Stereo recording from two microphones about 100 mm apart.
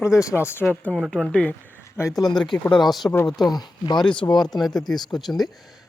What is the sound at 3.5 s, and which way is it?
Speech, 45° left (ahead or behind).